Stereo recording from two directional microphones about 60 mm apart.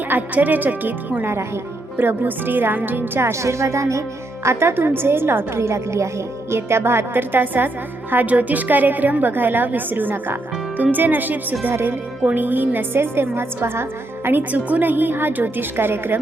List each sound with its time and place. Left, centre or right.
0.1 s a woman's voice: right
4.4 s a woman's voice: right
14.3 s a woman's voice: right